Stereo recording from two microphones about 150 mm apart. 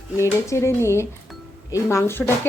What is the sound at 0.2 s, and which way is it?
Speech, 20° left (ahead or behind).